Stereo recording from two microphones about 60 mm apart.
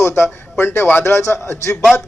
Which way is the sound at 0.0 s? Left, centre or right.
Left.